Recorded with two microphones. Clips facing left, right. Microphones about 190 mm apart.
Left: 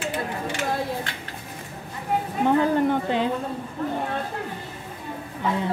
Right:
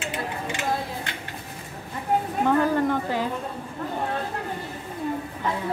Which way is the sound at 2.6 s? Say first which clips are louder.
Left 2 dB; 20° left (ahead or behind).